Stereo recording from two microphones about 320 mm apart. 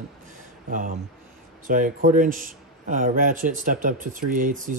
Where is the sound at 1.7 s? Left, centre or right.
Right.